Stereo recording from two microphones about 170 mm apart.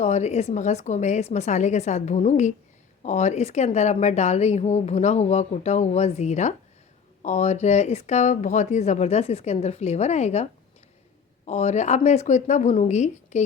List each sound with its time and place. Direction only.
0.0 s speech: 40° left (ahead or behind)